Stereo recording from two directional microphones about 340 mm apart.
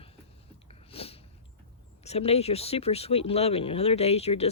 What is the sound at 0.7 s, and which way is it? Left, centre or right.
Sniff, centre.